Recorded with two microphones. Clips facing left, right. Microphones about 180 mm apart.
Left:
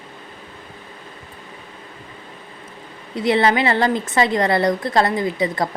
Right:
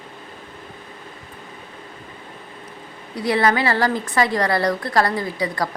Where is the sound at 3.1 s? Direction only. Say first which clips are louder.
Left 2 dB; 25° left (ahead or behind).